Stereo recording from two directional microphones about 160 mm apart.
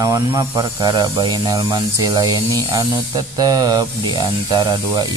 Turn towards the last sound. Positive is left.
turn(degrees=-25)  # may be behind; listen again after turning